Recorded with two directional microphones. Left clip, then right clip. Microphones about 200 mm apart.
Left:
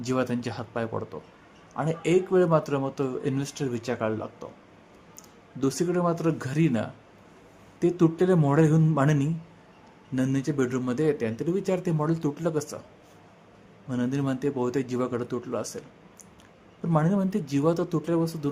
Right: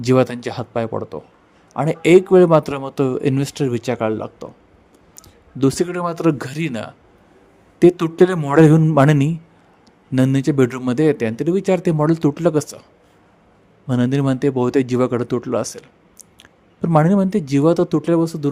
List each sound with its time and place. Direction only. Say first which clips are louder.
0.0 s speech: right 11 dB; 40° right (ahead or behind)
5.5 s a man's voice: right 7 dB; 40° right (ahead or behind)
13.8 s speech: right 10 dB; 45° right (ahead or behind)